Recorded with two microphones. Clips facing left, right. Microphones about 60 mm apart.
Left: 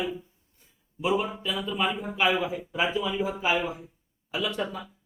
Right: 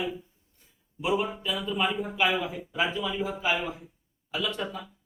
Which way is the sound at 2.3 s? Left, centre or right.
Centre.